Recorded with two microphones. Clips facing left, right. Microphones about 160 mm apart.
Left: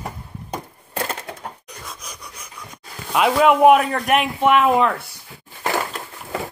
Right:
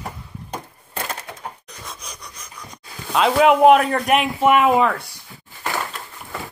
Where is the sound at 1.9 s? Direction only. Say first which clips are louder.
Right 1 dB; 5° left (ahead or behind).